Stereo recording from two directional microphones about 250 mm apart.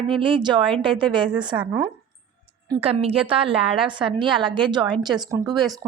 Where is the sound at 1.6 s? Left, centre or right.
Centre.